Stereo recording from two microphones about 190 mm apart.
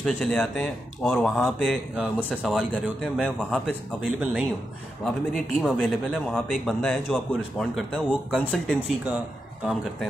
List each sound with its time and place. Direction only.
0.0 s a man's voice: 5° left (ahead or behind)